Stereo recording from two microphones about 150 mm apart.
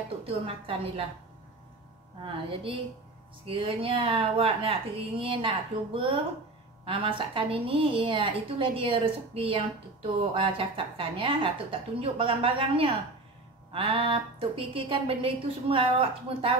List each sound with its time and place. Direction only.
0.7 s a woman's voice: 40° right (ahead or behind)
2.2 s a woman's voice: 35° right (ahead or behind)